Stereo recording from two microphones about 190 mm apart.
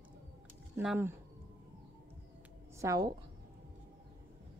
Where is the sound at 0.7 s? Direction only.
10° right (ahead or behind).